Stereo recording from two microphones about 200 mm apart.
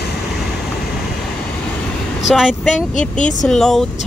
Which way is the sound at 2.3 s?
Centre (ahead or behind).